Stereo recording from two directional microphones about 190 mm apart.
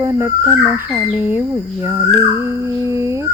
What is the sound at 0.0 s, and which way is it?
Speech, 15° right (ahead or behind).